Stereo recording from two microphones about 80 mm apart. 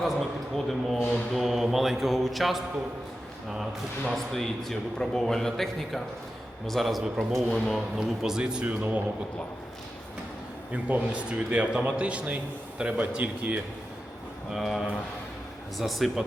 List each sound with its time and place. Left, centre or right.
0.0 s a man's voice: centre
8.2 s a man's voice: centre
8.6 s speech: right
10.7 s a man's voice: centre
14.5 s speech: centre